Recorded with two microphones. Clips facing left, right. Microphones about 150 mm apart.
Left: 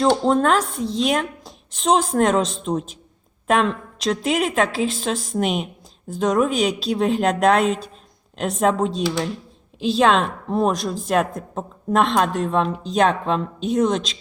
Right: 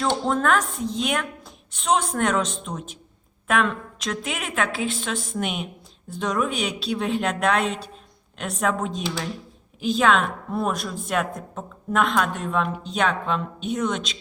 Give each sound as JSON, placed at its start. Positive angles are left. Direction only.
{"t": 0.3, "sound": "a woman's voice", "side_deg": 30}